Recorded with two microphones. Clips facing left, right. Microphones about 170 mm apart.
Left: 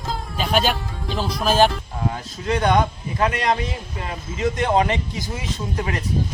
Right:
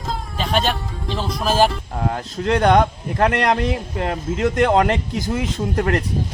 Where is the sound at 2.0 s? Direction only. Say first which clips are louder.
Right 4 dB; 60° right (ahead or behind).